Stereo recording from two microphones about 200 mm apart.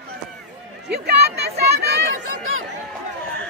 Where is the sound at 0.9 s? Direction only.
55° right (ahead or behind).